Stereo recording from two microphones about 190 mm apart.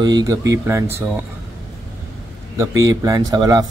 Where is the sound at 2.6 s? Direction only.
20° right (ahead or behind).